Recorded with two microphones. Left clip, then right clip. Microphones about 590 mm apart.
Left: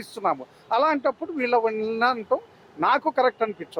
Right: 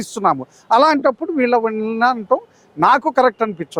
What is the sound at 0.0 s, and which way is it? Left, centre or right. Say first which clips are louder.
Speech: right 8 dB; right.